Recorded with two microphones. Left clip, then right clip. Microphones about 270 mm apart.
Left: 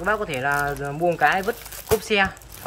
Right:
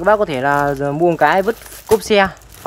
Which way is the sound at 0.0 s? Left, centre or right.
Right.